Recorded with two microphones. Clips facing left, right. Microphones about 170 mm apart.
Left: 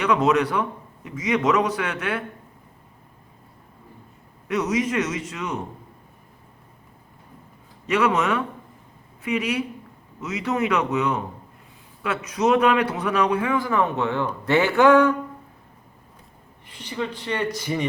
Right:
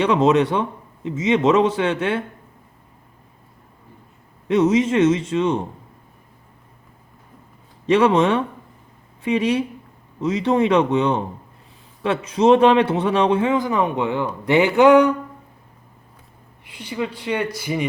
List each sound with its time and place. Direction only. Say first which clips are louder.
0.0 s a man's voice: right 4 dB; 25° right (ahead or behind)
4.4 s a man's voice: right 7 dB; 25° right (ahead or behind)
7.9 s a man's voice: right 6 dB; 30° right (ahead or behind)
16.6 s speech: right 3 dB; 10° right (ahead or behind)